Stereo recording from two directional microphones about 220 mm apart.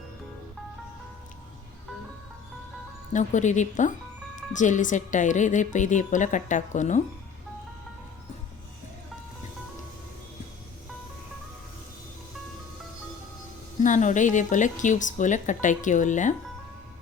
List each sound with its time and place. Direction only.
3.1 s a woman's voice: 35° left (ahead or behind)
13.8 s a woman's voice: 35° left (ahead or behind)